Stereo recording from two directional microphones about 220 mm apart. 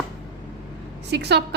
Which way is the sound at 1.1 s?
50° right (ahead or behind).